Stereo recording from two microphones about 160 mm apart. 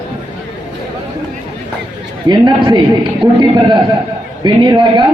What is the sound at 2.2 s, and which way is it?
Speech, 25° right (ahead or behind).